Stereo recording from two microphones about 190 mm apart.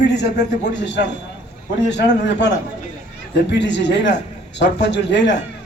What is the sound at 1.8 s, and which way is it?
Speech, 65° left (ahead or behind).